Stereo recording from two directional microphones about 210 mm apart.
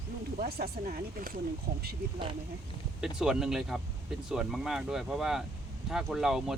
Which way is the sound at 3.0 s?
5° right (ahead or behind).